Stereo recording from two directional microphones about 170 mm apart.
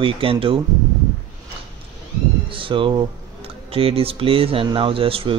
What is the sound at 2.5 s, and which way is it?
Speech, 30° right (ahead or behind).